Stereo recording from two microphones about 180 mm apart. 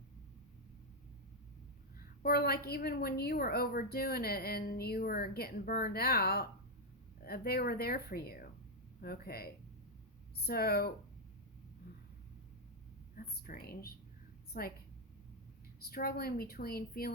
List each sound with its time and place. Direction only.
2.2 s a woman's voice: 60° left (ahead or behind)
13.1 s a woman's voice: 55° left (ahead or behind)
15.8 s a woman's voice: 55° left (ahead or behind)